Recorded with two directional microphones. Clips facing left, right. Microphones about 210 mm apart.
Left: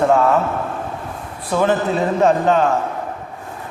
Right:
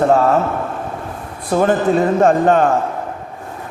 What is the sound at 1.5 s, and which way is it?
A man's voice, 45° right (ahead or behind).